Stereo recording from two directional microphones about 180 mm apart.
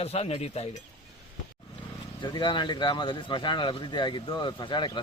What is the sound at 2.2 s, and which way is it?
Speech, 25° left (ahead or behind).